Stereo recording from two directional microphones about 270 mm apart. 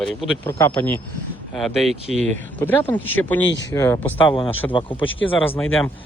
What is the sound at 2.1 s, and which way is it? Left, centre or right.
Speech, right.